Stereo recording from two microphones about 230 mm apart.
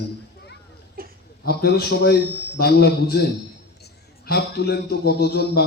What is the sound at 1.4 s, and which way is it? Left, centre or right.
A man's voice, left.